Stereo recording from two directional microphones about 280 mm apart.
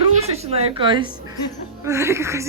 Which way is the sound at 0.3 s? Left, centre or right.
Right.